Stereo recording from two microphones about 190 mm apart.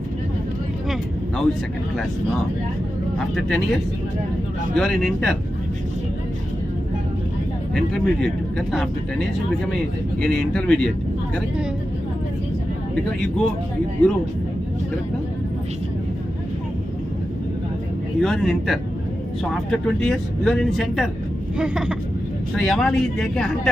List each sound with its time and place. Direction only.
3.3 s speech: centre (ahead or behind)
7.9 s speech: 5° left (ahead or behind)
13.1 s speech: 5° left (ahead or behind)
18.2 s speech: centre (ahead or behind)